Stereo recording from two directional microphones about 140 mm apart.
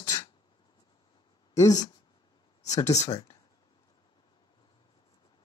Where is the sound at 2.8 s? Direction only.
55° left (ahead or behind).